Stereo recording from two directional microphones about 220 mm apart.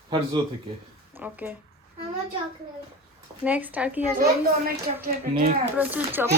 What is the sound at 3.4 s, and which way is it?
Speech, 5° right (ahead or behind).